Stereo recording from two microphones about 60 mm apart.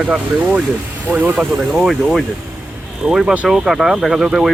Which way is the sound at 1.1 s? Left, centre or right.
Right.